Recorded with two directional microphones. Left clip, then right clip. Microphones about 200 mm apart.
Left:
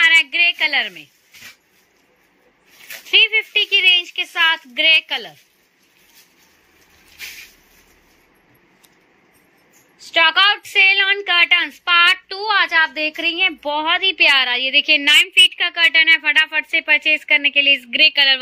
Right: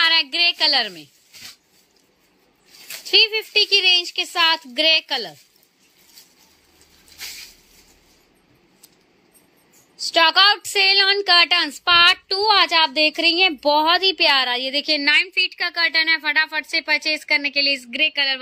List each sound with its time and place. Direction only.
0.0 s a sound: 35° right (ahead or behind)
0.6 s a woman's voice: 35° right (ahead or behind)
3.1 s a woman's voice: 35° right (ahead or behind)
9.9 s a woman's voice: 30° right (ahead or behind)
15.0 s speech: 5° right (ahead or behind)
15.7 s speech: 20° right (ahead or behind)